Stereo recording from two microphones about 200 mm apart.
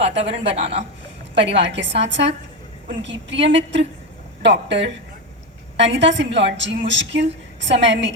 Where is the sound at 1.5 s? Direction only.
60° right (ahead or behind).